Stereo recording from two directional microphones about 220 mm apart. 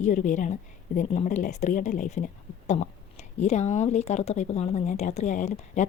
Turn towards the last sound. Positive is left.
turn(degrees=30)  # may be behind; listen again after turning